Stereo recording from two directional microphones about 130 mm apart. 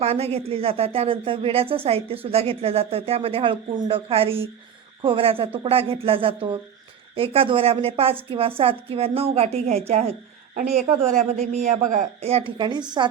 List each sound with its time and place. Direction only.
0.0 s speech: 50° right (ahead or behind)
11.3 s a man's voice: 60° right (ahead or behind); by 12.0 s 75° right (ahead or behind)
12.2 s a woman's voice: 45° right (ahead or behind)